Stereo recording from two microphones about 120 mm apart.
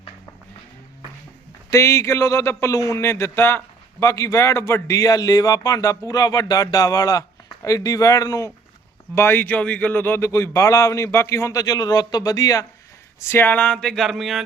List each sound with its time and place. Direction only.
1.7 s speech: 25° left (ahead or behind); by 14.4 s centre (ahead or behind)